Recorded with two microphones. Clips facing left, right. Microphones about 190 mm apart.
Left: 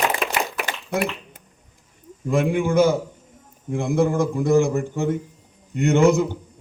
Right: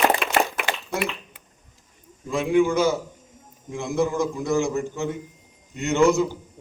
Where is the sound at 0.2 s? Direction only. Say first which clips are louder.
Right 2 dB; 50° left (ahead or behind).